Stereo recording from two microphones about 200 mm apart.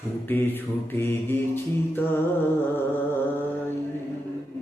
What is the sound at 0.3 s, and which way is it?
Mantra, 10° left (ahead or behind).